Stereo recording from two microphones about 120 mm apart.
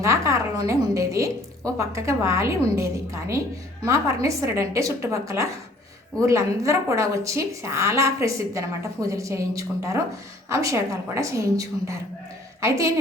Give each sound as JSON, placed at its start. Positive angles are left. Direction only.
{"t": 0.0, "sound": "a woman's voice", "side_deg": -25}